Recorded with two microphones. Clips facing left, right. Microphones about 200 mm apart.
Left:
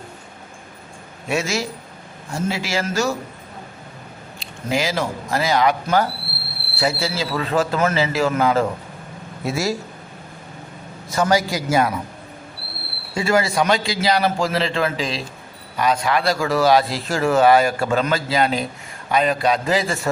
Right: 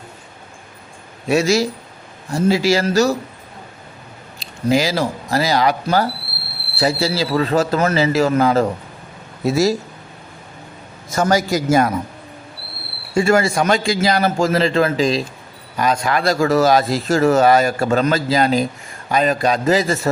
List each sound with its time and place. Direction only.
1.3 s a man's voice: 35° right (ahead or behind)
4.4 s a man's voice: 35° right (ahead or behind)
11.1 s a man's voice: 45° right (ahead or behind)
13.1 s a man's voice: 50° right (ahead or behind)